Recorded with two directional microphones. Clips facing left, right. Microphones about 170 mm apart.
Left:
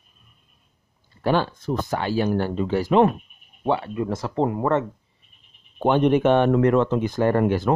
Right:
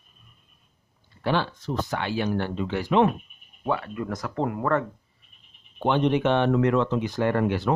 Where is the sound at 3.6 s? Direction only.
25° left (ahead or behind).